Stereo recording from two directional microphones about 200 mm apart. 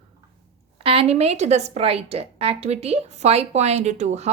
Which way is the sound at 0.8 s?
30° right (ahead or behind).